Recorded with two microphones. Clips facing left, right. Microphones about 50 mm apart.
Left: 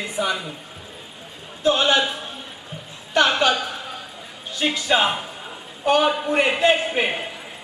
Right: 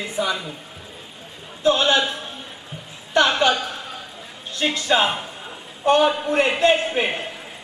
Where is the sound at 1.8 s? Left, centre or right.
Centre.